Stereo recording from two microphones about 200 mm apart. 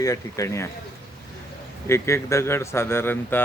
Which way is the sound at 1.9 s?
15° left (ahead or behind).